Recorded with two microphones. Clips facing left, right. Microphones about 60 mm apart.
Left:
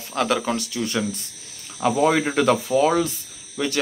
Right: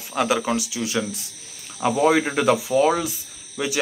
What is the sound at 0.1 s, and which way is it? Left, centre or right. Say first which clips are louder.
Speech: right 1 dB; centre.